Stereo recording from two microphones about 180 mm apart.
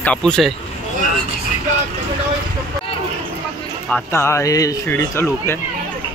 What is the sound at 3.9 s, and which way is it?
Speech, 10° left (ahead or behind).